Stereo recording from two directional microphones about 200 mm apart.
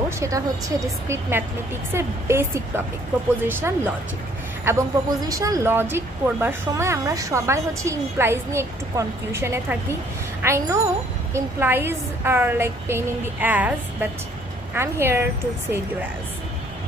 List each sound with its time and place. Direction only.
0.2 s a woman's voice: 15° right (ahead or behind)